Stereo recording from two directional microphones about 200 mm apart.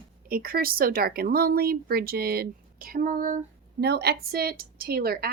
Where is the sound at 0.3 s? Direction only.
45° right (ahead or behind).